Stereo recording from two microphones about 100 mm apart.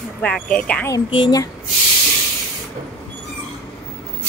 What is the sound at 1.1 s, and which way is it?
Speech, 50° left (ahead or behind).